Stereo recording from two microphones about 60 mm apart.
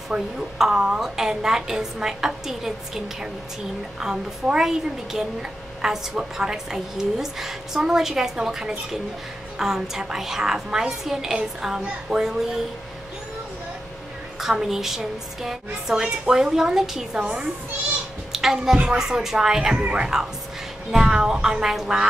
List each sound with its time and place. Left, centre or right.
0.1 s a woman's voice: centre
14.4 s a woman's voice: centre
18.3 s a sound: centre
18.9 s a woman's voice: centre